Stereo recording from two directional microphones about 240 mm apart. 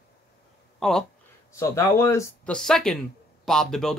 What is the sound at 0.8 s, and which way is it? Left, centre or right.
Speech, centre.